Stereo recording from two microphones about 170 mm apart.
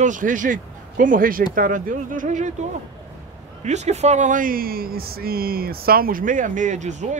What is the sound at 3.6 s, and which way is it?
Speech, 40° right (ahead or behind).